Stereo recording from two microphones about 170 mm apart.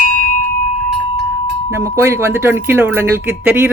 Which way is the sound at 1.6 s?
15° right (ahead or behind).